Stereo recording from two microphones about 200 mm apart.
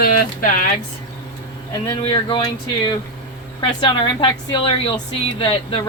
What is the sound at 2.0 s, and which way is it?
A woman's voice, 25° left (ahead or behind).